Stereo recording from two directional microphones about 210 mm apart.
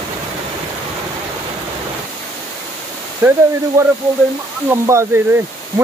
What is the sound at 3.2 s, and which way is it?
Speech, 5° right (ahead or behind).